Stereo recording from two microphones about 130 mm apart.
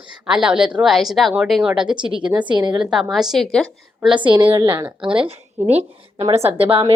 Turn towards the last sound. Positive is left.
turn(degrees=-45)  # may be behind; listen again after turning